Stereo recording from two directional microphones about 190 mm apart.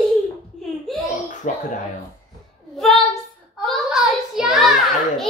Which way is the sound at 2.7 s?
Centre (ahead or behind).